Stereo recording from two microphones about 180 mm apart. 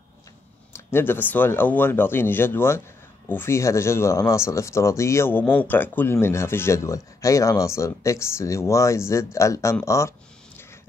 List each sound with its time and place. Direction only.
0.7 s speech: 10° left (ahead or behind)